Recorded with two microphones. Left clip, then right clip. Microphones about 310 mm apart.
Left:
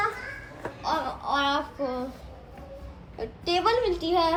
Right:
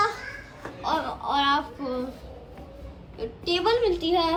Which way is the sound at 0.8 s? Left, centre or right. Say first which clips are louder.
Right 2 dB; centre.